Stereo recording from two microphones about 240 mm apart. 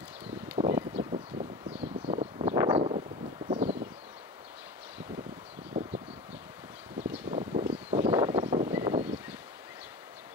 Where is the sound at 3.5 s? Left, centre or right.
Right.